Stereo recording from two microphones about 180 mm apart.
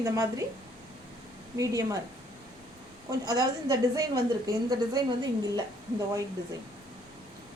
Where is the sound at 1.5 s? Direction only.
20° right (ahead or behind).